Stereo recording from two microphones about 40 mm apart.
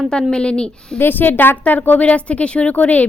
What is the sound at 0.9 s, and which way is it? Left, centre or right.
A woman's voice, left.